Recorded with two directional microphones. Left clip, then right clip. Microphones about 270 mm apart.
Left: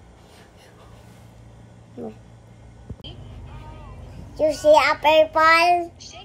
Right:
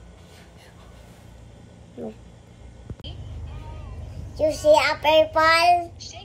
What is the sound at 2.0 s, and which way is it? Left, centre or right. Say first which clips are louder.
Speech: even; centre.